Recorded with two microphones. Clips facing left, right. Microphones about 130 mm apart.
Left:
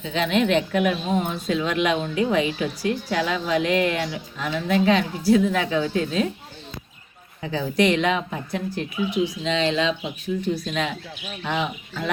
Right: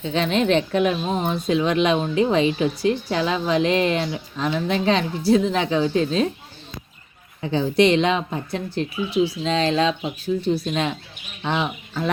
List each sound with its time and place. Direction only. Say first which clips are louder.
0.1 s a woman's voice: right 1 dB; 35° right (ahead or behind)
7.4 s speech: right 3 dB; 25° right (ahead or behind)
10.4 s a woman's voice: right 3 dB; 30° right (ahead or behind)